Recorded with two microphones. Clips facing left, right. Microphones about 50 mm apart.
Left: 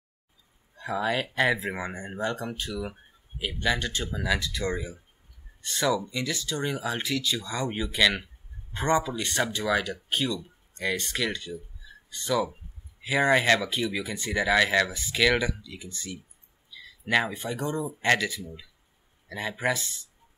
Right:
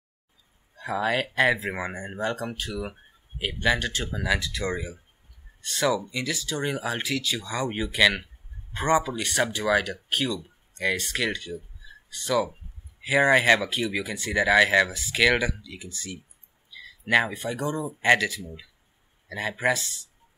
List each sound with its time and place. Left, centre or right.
0.8 s speech: centre
4.1 s speech: centre
5.6 s speech: centre
5.9 s speech: centre
13.0 s speech: centre
14.1 s speech: centre
17.0 s speech: centre
17.4 s speech: centre
18.0 s speech: centre
19.3 s speech: centre